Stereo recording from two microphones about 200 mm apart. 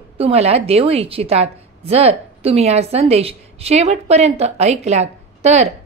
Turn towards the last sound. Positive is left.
turn(degrees=-35)  # may be behind; listen again after turning